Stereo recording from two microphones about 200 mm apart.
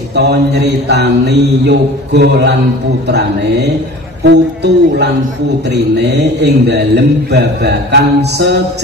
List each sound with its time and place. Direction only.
0.1 s a man's voice: 55° right (ahead or behind)